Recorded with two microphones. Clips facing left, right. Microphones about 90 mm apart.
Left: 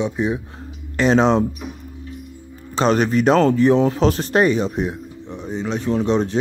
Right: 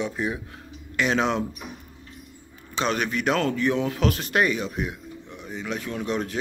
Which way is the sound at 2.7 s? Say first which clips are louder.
Left 9 dB; 35° left (ahead or behind).